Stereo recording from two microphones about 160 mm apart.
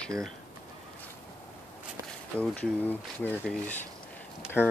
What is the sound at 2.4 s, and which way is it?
Speech, 5° left (ahead or behind).